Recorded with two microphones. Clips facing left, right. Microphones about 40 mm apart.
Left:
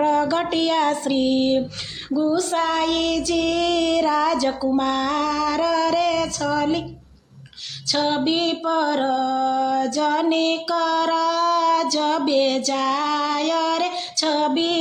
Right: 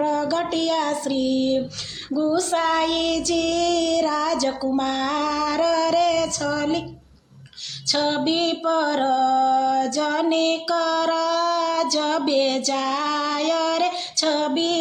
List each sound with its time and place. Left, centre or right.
0.0 s child singing: left
2.0 s child singing: centre
7.9 s music: centre
14.5 s child singing: centre